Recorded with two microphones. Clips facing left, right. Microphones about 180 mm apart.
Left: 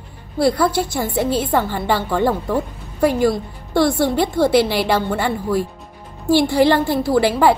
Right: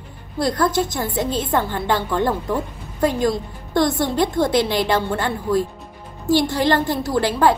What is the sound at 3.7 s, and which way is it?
A woman's voice, 10° left (ahead or behind).